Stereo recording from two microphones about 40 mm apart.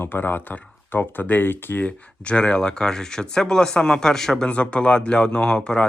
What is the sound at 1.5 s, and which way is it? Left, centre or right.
Speech, left.